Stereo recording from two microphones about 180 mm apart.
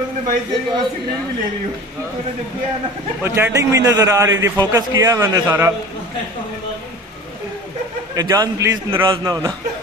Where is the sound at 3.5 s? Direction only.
20° right (ahead or behind).